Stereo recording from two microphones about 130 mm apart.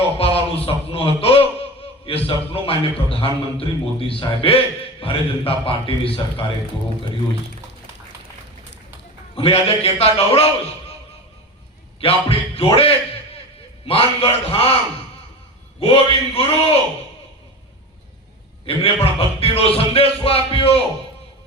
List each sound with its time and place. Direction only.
0.2 s a sound: 50° left (ahead or behind)
2.0 s a man's voice: 45° left (ahead or behind)
9.3 s a man's voice: 50° left (ahead or behind)
11.9 s a man's voice: 45° left (ahead or behind)
15.8 s a man's voice: 45° left (ahead or behind)
18.6 s a man's voice: 45° left (ahead or behind)